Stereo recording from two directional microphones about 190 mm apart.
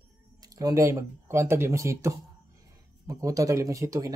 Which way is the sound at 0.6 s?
15° right (ahead or behind).